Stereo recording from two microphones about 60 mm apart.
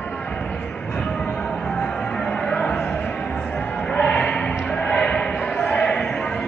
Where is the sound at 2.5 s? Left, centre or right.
Left.